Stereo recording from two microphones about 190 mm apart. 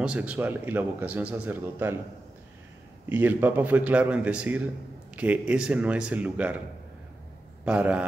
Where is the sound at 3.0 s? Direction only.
10° right (ahead or behind).